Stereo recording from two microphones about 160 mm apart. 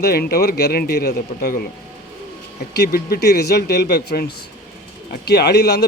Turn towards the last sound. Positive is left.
turn(degrees=90)